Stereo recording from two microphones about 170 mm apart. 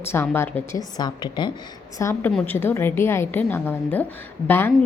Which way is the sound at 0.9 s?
25° left (ahead or behind).